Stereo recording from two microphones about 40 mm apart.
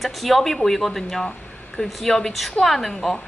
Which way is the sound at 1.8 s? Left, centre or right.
Left.